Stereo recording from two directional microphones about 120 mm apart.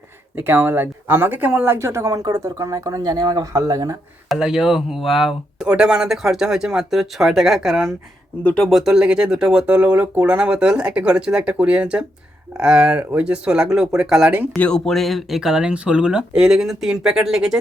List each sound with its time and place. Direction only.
0.3 s speech: 15° right (ahead or behind)
4.3 s speech: 5° right (ahead or behind)
8.4 s speech: 10° left (ahead or behind)
8.7 s speech: 5° right (ahead or behind)
14.5 s speech: 5° left (ahead or behind)